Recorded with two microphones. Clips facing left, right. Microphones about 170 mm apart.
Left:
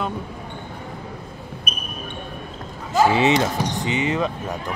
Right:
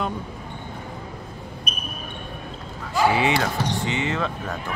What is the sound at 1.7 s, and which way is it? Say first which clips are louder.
Basketball bounce: left 3 dB; 45° left (ahead or behind).